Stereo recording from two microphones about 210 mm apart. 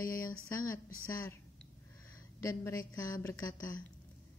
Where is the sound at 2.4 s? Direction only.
15° left (ahead or behind).